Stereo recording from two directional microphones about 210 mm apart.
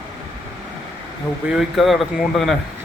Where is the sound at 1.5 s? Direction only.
Centre (ahead or behind).